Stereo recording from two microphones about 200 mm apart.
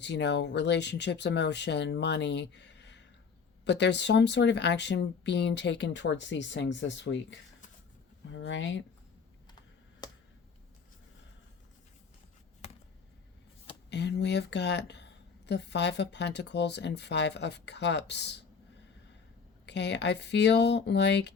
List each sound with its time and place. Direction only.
0.0 s a woman's voice: 60° left (ahead or behind)
10.0 s a sound: 20° left (ahead or behind)
13.9 s a woman's voice: 55° left (ahead or behind)
19.6 s a woman's voice: 60° left (ahead or behind)